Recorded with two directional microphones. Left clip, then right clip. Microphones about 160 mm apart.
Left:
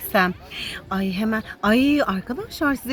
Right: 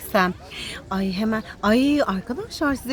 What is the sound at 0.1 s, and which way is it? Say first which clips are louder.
A woman's voice: left 1 dB; 10° left (ahead or behind).